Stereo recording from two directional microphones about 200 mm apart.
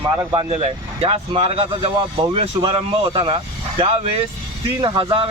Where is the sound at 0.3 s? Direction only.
25° right (ahead or behind).